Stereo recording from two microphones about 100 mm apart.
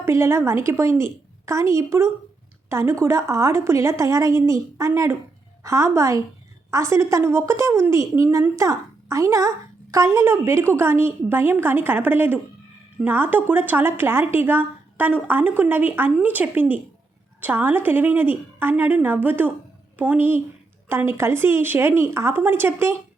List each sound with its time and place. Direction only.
0.0 s a woman's voice: 25° right (ahead or behind)